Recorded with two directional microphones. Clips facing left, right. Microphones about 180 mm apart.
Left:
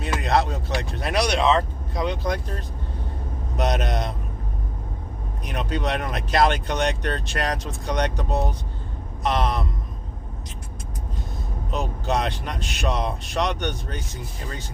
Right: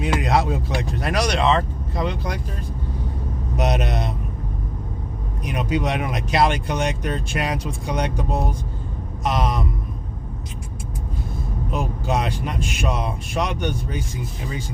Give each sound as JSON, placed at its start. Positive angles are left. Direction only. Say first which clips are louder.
{"t": 0.1, "sound": "speech", "louder": "right 1 dB", "side_deg": -5}
{"t": 3.6, "sound": "speech", "louder": "right 1 dB", "side_deg": -5}
{"t": 5.5, "sound": "speech", "louder": "right 3 dB", "side_deg": -10}
{"t": 11.7, "sound": "speech", "louder": "right 1 dB", "side_deg": -10}